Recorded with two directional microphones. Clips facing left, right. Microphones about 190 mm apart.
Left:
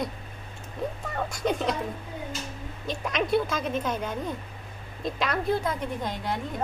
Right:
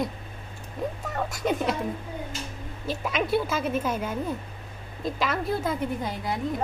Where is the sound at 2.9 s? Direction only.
5° right (ahead or behind).